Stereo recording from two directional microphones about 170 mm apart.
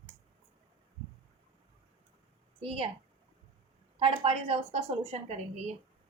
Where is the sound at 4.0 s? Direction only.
35° right (ahead or behind).